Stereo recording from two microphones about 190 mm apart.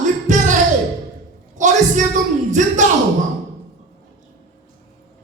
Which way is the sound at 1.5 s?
40° right (ahead or behind).